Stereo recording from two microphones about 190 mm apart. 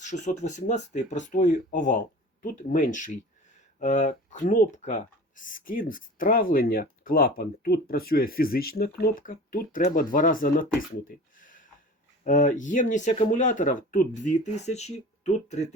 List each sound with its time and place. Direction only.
0.0 s speech: 40° left (ahead or behind)
11.3 s a sound: 45° left (ahead or behind)
12.2 s speech: 40° left (ahead or behind)